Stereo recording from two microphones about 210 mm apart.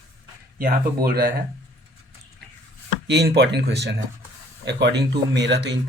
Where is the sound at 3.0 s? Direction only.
50° right (ahead or behind).